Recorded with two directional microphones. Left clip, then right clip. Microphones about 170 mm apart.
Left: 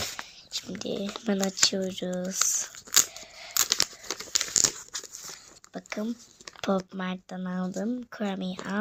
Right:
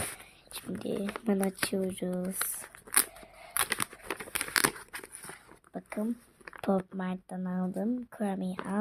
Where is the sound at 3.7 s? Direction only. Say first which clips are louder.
Left 6 dB; 25° right (ahead or behind).